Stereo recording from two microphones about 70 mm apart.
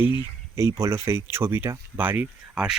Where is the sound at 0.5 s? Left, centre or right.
Right.